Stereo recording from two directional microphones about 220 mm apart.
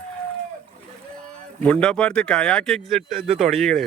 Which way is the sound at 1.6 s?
5° left (ahead or behind).